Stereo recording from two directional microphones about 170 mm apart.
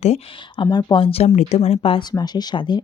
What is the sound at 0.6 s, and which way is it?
Speech, 25° left (ahead or behind).